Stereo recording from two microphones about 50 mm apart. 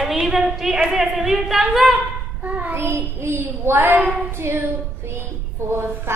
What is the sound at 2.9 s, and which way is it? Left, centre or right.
A woman's voice, right.